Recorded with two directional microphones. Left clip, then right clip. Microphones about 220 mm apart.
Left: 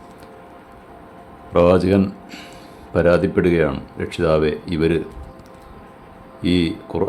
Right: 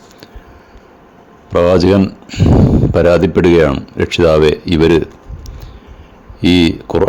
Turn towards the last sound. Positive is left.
turn(degrees=-30)  # may be behind; listen again after turning